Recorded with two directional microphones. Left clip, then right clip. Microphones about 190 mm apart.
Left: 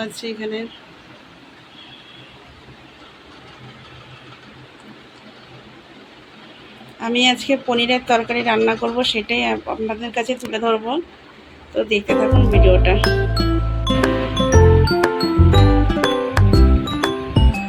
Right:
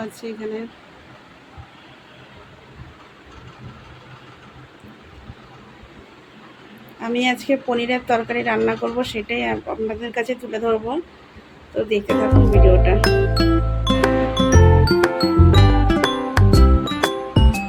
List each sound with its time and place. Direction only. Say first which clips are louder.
0.0 s speech: left 3 dB; 5° right (ahead or behind)
7.0 s speech: left 4 dB; centre (ahead or behind)
11.7 s music: left 2 dB; centre (ahead or behind)